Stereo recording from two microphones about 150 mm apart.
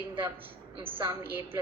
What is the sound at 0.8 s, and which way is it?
Speech, 15° right (ahead or behind).